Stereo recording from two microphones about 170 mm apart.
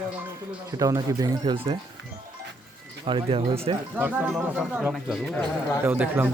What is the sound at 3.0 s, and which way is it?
Speech, 30° right (ahead or behind).